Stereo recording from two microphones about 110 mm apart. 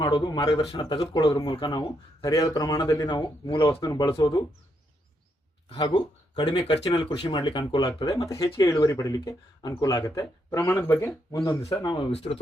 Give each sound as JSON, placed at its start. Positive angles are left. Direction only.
{"t": 0.0, "sound": "speech", "side_deg": 40}
{"t": 0.4, "sound": "speech", "side_deg": 60}
{"t": 0.8, "sound": "speech", "side_deg": 45}
{"t": 2.2, "sound": "speech", "side_deg": 30}
{"t": 3.8, "sound": "speech", "side_deg": 30}
{"t": 5.9, "sound": "speech", "side_deg": 45}
{"t": 11.3, "sound": "speech", "side_deg": 35}
{"t": 12.1, "sound": "speech", "side_deg": 65}